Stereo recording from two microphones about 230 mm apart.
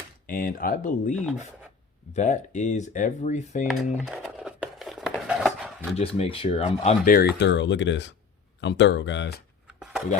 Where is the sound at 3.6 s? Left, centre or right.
Centre.